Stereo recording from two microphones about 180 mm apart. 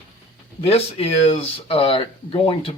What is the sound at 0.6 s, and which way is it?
Speech, 35° left (ahead or behind).